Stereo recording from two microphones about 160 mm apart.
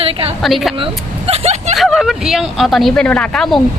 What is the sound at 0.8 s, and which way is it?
Speech, 40° right (ahead or behind).